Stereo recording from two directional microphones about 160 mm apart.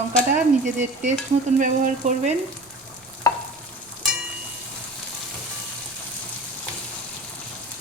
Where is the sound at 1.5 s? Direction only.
55° right (ahead or behind).